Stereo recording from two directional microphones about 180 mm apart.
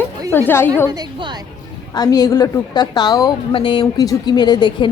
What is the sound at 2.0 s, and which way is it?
A woman's voice, 20° left (ahead or behind).